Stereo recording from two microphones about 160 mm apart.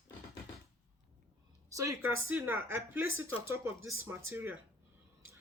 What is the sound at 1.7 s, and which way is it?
A woman's voice, 20° right (ahead or behind).